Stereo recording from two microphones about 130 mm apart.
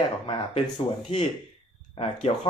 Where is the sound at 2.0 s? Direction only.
45° left (ahead or behind).